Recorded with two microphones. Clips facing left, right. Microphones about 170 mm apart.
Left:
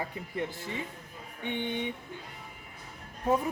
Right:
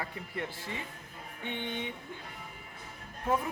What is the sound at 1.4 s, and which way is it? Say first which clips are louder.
Speech: left 4 dB; 15° left (ahead or behind).